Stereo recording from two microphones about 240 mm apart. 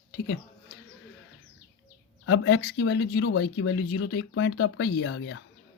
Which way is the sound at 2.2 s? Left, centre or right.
Left.